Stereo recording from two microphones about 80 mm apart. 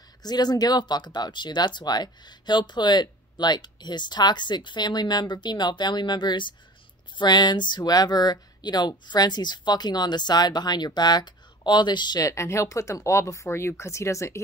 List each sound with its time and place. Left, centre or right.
0.2 s speech: left
12.3 s speech: left